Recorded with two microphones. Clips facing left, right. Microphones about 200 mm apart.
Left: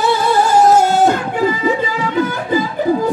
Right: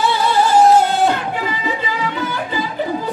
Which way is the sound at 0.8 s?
45° left (ahead or behind).